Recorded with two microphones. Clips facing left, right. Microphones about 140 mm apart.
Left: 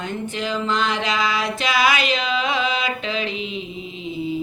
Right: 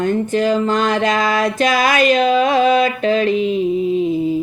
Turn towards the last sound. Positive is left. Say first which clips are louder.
# right 11 dB
turn(degrees=-50)  # may be behind; listen again after turning